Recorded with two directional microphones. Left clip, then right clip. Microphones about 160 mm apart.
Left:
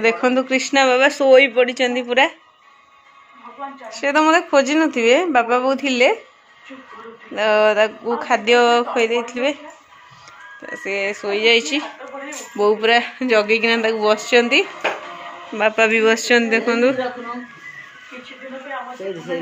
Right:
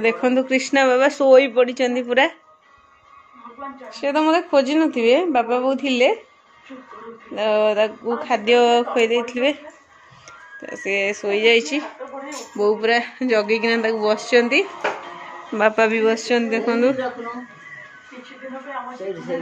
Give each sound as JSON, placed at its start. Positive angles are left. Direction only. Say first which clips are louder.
{"t": 0.0, "sound": "speech", "louder": "left 2 dB", "side_deg": -10}
{"t": 3.9, "sound": "speech", "louder": "left 3 dB", "side_deg": -5}
{"t": 7.3, "sound": "speech", "louder": "left 3 dB", "side_deg": -5}
{"t": 10.6, "sound": "speech", "louder": "right 1 dB", "side_deg": -20}
{"t": 12.5, "sound": "speech", "louder": "left 3 dB", "side_deg": 0}
{"t": 15.5, "sound": "speech", "louder": "left 1 dB", "side_deg": -15}